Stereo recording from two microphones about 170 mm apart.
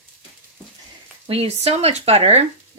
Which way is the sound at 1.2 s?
35° right (ahead or behind).